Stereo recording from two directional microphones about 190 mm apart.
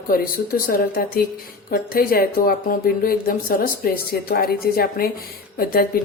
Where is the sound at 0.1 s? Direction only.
50° left (ahead or behind).